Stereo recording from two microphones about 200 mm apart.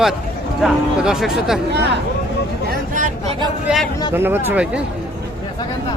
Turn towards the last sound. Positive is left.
turn(degrees=-10)  # may be behind; listen again after turning